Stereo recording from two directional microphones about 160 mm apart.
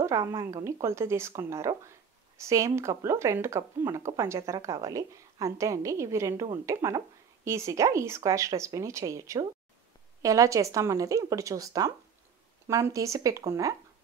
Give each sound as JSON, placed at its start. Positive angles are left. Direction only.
{"t": 0.0, "sound": "speech", "side_deg": -20}